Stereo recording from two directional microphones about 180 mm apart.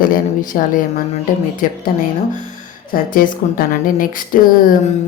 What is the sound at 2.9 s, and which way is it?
A woman's voice, 50° left (ahead or behind).